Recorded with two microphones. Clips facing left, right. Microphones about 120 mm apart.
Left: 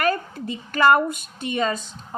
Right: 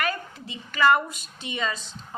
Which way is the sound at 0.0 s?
45° left (ahead or behind).